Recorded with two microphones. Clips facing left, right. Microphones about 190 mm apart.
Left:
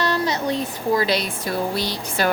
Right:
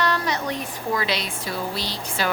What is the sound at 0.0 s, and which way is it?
Speech, 30° left (ahead or behind).